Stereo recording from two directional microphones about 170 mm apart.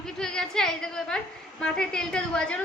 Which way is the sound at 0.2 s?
5° left (ahead or behind).